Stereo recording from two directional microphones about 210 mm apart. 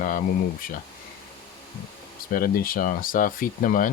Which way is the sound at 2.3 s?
45° left (ahead or behind).